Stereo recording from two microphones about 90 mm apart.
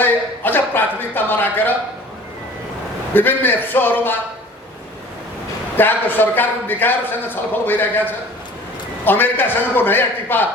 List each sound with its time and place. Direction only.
0.0 s a sound: 20° left (ahead or behind)
3.1 s a man's voice: 20° left (ahead or behind)
5.7 s a man's voice: 20° left (ahead or behind)
9.0 s a man's voice: 20° left (ahead or behind)